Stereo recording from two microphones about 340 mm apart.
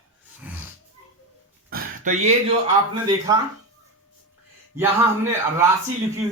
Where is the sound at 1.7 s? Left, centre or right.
Right.